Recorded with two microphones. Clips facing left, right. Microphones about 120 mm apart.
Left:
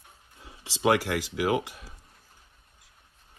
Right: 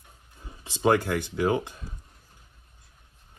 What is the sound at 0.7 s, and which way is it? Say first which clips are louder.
Speech: right 1 dB; 90° left.